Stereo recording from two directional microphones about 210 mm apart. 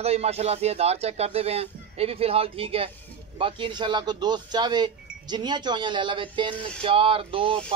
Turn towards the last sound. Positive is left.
turn(degrees=-25)  # may be behind; listen again after turning